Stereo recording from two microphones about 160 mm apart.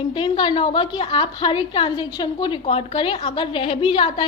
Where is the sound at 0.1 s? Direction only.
30° left (ahead or behind).